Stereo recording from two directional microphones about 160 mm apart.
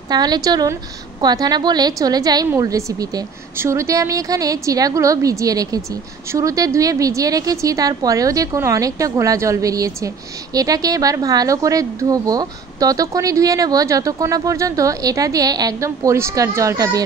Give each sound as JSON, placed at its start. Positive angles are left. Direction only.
{"t": 0.1, "sound": "a woman's voice", "side_deg": -25}